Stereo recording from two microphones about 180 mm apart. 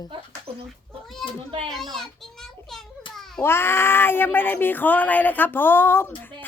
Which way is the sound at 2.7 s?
Centre (ahead or behind).